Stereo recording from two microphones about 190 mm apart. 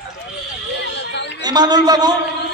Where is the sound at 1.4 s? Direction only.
20° right (ahead or behind).